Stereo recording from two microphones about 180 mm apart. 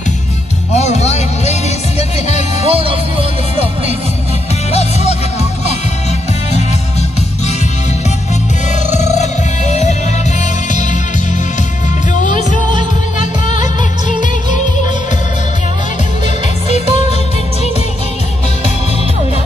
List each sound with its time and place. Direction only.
0.7 s music: 40° left (ahead or behind)
2.6 s music: 30° right (ahead or behind)
8.9 s music: 40° left (ahead or behind)
12.2 s music: 45° left (ahead or behind)